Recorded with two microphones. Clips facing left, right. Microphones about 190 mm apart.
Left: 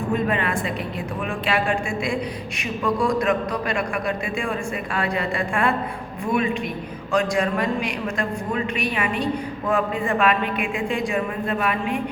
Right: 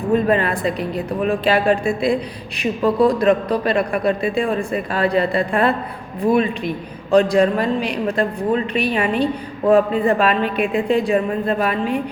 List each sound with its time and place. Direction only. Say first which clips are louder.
0.1 s a woman's voice: right 7 dB; 35° right (ahead or behind)